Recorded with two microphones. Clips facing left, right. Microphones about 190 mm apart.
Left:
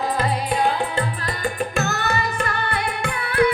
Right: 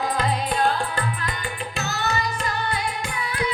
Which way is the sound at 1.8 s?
55° left (ahead or behind).